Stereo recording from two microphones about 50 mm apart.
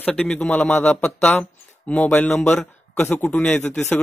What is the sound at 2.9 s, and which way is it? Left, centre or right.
Speech, left.